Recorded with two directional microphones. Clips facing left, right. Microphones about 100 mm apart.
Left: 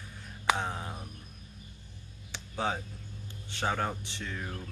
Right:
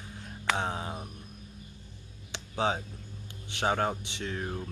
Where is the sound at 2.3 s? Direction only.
20° right (ahead or behind).